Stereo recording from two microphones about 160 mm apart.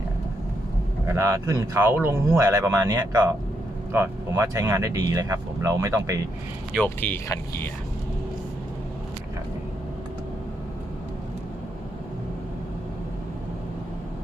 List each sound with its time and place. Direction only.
1.0 s speech: 15° right (ahead or behind)
6.7 s speech: 10° left (ahead or behind)